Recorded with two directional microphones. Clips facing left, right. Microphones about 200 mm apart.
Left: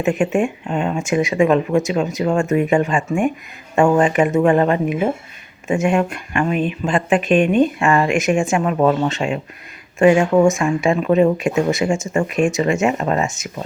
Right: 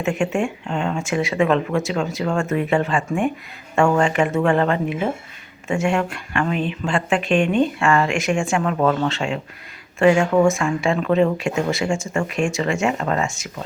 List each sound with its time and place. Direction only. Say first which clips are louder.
0.0 s speech: left 4 dB; 20° left (ahead or behind)